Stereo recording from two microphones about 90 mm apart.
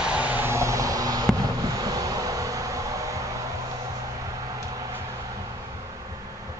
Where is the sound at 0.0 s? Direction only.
15° right (ahead or behind); by 3.2 s 40° right (ahead or behind).